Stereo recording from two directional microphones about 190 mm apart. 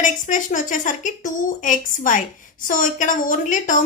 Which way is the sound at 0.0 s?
40° left (ahead or behind).